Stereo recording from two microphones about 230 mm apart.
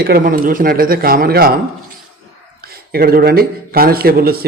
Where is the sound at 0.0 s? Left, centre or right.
Right.